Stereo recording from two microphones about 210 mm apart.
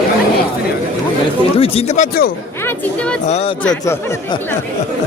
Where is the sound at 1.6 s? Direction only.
30° left (ahead or behind).